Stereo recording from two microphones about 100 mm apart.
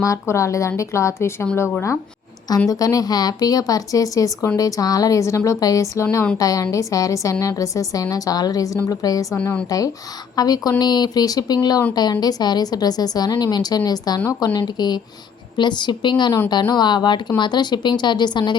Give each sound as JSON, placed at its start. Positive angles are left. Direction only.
{"t": 0.0, "sound": "a woman's voice", "side_deg": 30}
{"t": 2.6, "sound": "a woman's voice", "side_deg": 35}
{"t": 9.3, "sound": "speech", "side_deg": 20}
{"t": 9.6, "sound": "a woman's voice", "side_deg": 35}